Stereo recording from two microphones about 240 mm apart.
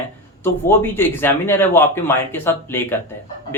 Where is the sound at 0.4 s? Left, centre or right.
Centre.